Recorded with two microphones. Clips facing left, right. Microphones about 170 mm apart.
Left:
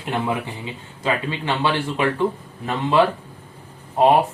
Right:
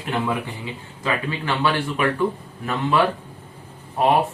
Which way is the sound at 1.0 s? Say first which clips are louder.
Left 2 dB; 25° left (ahead or behind).